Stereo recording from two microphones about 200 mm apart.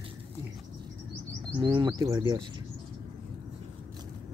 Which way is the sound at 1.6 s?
20° right (ahead or behind).